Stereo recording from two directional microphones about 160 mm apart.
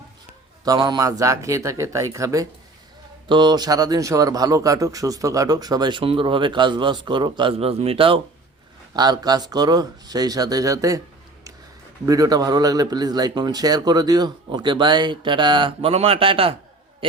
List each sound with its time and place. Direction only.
0.6 s speech: 25° right (ahead or behind)
12.0 s speech: 20° right (ahead or behind)